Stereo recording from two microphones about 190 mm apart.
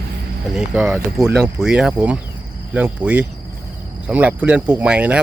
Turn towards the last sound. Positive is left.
turn(degrees=-5)  # may be behind; listen again after turning